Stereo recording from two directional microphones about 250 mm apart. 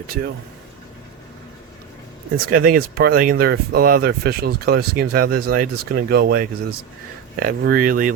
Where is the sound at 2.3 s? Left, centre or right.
Right.